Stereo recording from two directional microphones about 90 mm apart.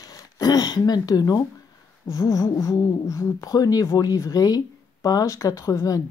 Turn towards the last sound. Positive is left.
turn(degrees=40)  # may be behind; listen again after turning